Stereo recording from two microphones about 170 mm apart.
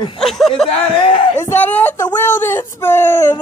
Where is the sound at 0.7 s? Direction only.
35° left (ahead or behind).